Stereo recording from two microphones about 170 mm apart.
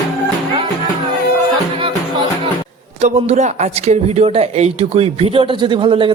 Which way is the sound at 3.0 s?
40° right (ahead or behind).